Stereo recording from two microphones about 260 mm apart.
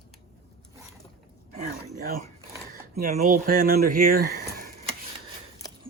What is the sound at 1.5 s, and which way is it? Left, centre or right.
Dog, right.